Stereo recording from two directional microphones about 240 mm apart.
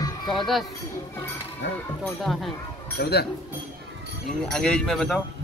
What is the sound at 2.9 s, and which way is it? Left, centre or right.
Speech, left.